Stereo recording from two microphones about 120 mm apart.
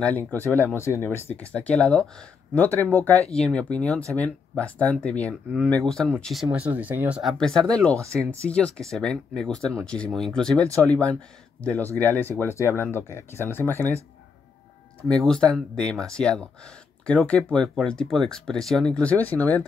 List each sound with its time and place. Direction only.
0.0 s speech: 15° left (ahead or behind)
6.6 s speech: 15° right (ahead or behind)
7.2 s speech: 5° left (ahead or behind)
15.2 s speech: 5° left (ahead or behind)